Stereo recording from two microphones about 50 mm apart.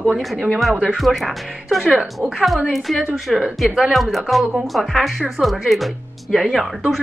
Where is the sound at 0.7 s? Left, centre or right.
Right.